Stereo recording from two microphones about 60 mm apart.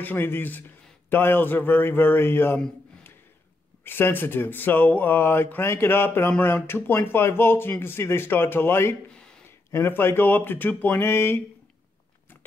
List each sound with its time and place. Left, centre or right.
0.0 s a man's voice: left
3.8 s a man's voice: left
9.1 s a sound: centre
9.7 s a man's voice: left